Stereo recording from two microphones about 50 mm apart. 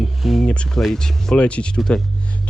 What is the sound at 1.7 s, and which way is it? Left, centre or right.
Speech, centre.